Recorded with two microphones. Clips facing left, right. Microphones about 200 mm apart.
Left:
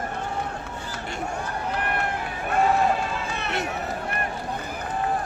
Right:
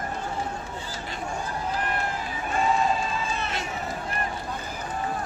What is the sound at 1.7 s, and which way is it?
Run, 65° left (ahead or behind).